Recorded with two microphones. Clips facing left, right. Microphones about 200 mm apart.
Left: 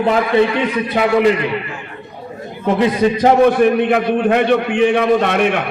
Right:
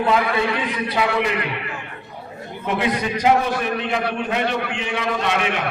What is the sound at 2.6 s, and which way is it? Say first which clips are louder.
A man's voice: left 8 dB; 40° left (ahead or behind).